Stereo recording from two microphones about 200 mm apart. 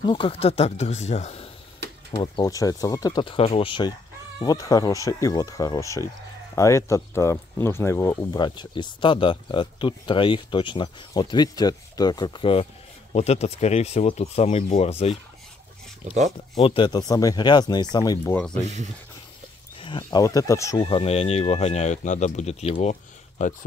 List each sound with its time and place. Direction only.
0.0 s speech: 25° left (ahead or behind)
2.1 s speech: 20° left (ahead or behind)
16.5 s speech: 25° left (ahead or behind)
19.8 s speech: 25° left (ahead or behind)
20.8 s speech: 30° left (ahead or behind)